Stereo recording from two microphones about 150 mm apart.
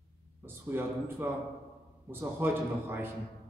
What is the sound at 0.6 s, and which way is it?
Speech, 15° right (ahead or behind).